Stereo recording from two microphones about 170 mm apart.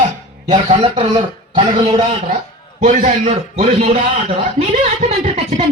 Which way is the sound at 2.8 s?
45° right (ahead or behind).